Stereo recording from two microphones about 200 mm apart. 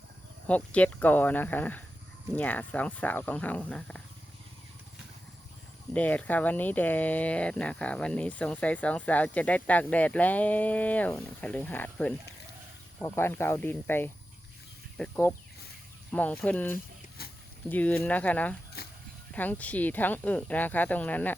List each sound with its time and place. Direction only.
0.4 s speech: 5° left (ahead or behind)
5.9 s speech: 5° left (ahead or behind)
17.2 s a sound: 50° left (ahead or behind)
17.7 s speech: 5° left (ahead or behind)
18.8 s a sound: 50° left (ahead or behind)
19.3 s speech: 10° left (ahead or behind)